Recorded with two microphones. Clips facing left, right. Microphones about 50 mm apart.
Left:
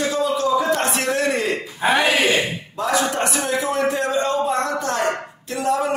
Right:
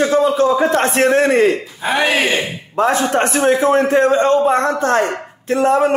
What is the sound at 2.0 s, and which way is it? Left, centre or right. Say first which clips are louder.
Speech: right 2 dB; right.